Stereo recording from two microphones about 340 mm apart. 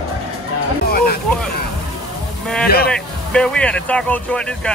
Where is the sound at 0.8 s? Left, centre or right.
Left.